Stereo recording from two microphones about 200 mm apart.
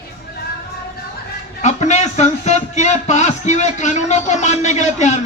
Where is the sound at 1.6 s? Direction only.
35° left (ahead or behind).